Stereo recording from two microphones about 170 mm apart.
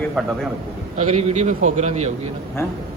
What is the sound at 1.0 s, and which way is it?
A man's voice, 40° right (ahead or behind).